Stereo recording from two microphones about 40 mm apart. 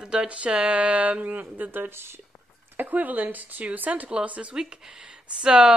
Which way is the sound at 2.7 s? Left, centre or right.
Right.